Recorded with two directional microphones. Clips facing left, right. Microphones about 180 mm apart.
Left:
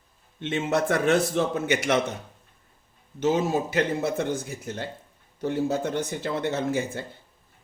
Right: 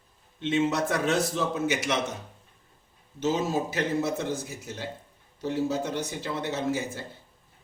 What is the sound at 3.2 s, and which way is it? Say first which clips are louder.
A man's voice: left 3 dB; 60° left (ahead or behind).